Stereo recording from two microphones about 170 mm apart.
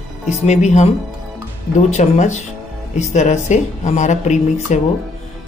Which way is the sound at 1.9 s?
45° left (ahead or behind).